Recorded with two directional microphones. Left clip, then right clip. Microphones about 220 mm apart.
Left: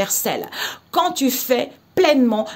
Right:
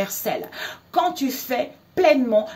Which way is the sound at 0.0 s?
45° left (ahead or behind).